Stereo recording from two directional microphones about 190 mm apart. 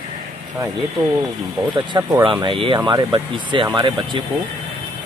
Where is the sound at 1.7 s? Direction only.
25° right (ahead or behind).